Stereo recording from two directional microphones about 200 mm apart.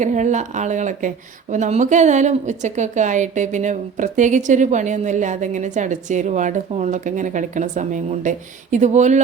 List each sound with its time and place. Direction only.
0.0 s speech: 35° right (ahead or behind)